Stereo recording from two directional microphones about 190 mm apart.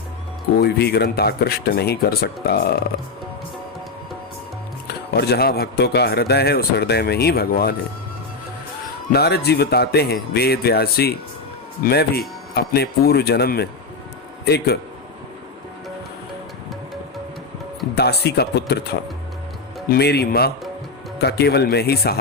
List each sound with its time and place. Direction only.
0.6 s speech: 60° left (ahead or behind)
4.9 s speech: 55° left (ahead or behind)
9.1 s speech: 55° left (ahead or behind)
17.9 s speech: 60° left (ahead or behind)